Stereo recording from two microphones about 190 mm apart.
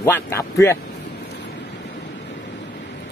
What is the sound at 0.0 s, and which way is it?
Speech, 15° left (ahead or behind).